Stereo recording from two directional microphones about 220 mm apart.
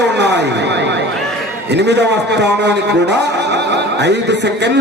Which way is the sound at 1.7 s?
50° right (ahead or behind).